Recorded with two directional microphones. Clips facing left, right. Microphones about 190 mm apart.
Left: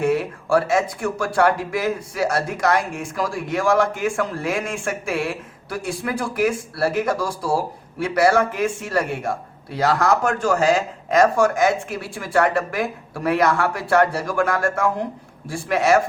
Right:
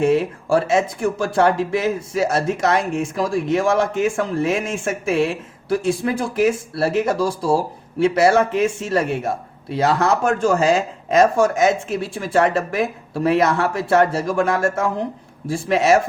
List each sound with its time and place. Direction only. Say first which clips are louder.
0.0 s speech: right 3 dB; 25° right (ahead or behind)